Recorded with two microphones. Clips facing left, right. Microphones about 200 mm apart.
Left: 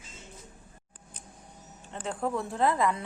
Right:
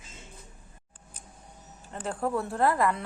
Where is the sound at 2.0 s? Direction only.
5° right (ahead or behind).